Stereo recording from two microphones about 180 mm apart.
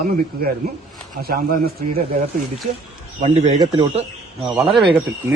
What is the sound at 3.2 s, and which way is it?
Speech, 35° right (ahead or behind).